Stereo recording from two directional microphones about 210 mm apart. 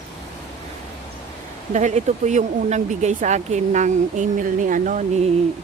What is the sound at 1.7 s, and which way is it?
Speech, 35° right (ahead or behind).